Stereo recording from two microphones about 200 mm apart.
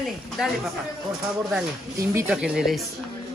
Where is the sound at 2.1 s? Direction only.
5° right (ahead or behind).